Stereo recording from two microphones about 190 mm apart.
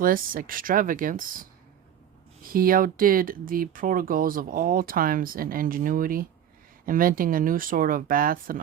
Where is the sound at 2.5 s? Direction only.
50° right (ahead or behind).